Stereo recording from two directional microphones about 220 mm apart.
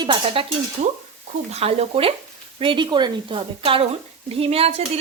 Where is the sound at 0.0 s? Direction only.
25° right (ahead or behind).